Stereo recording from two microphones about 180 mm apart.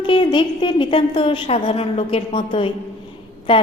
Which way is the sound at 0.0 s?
25° left (ahead or behind).